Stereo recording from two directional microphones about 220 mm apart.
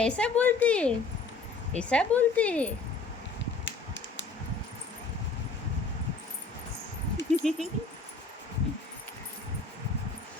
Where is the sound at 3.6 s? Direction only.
55° left (ahead or behind).